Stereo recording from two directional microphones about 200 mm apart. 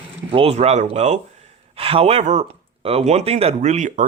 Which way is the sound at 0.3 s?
30° right (ahead or behind).